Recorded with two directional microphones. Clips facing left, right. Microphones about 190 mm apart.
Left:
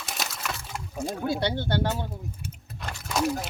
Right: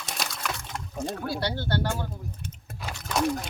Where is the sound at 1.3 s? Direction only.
20° left (ahead or behind).